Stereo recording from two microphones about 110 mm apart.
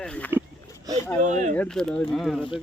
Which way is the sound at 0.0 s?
10° left (ahead or behind).